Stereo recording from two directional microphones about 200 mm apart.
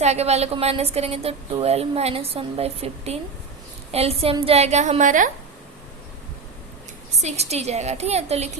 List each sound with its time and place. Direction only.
0.0 s a woman's voice: 35° right (ahead or behind)
7.2 s a woman's voice: 35° right (ahead or behind)